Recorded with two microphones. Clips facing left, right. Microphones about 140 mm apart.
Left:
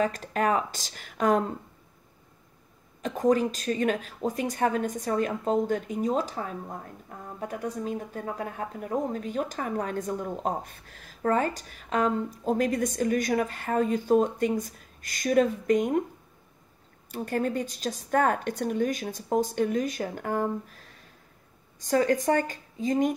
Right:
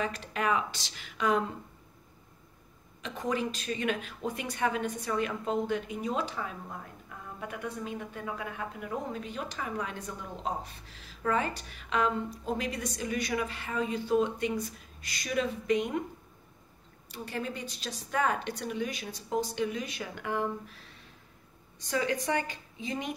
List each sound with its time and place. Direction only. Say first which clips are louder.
0.0 s speech: left 6 dB; 45° left (ahead or behind)
3.0 s speech: left 9 dB; 45° left (ahead or behind)
17.1 s speech: left 8 dB; 50° left (ahead or behind)